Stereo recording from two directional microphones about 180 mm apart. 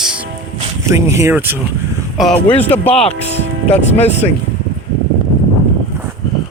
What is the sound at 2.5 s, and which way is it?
Speech, 35° left (ahead or behind).